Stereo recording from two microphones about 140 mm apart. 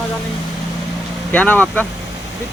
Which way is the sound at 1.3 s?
10° left (ahead or behind).